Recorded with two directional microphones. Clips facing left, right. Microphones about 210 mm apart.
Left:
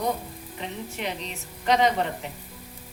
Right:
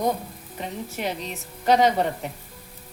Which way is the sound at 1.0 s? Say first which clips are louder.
Right 3 dB; 45° right (ahead or behind).